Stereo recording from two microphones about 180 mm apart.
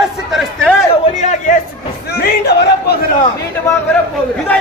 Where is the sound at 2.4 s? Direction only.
70° left (ahead or behind).